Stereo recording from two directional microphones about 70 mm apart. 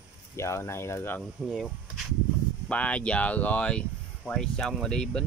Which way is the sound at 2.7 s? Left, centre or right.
Centre.